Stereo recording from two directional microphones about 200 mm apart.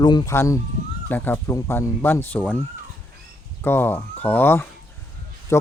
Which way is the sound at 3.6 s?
10° left (ahead or behind).